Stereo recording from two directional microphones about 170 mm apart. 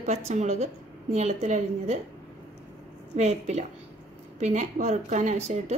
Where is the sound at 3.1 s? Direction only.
40° right (ahead or behind).